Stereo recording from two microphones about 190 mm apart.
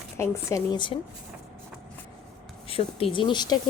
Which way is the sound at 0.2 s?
20° left (ahead or behind).